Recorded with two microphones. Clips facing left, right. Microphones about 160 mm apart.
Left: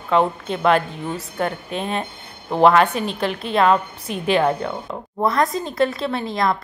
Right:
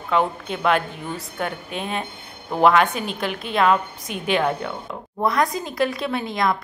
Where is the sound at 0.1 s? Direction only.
Centre (ahead or behind).